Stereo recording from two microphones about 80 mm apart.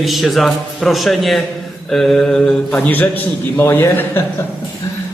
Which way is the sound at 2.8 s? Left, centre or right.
Left.